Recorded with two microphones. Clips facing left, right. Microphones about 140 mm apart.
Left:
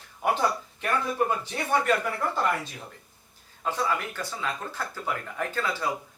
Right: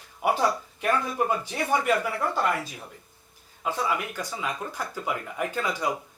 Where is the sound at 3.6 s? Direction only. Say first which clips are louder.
Even; 10° right (ahead or behind).